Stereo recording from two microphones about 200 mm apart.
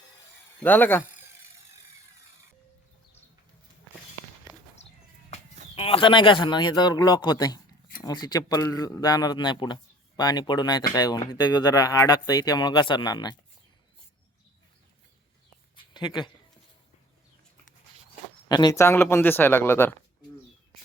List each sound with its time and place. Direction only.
0.6 s speech: 10° left (ahead or behind)
5.7 s speech: 30° left (ahead or behind)
15.7 s a sound: 20° left (ahead or behind)
18.4 s speech: 20° left (ahead or behind)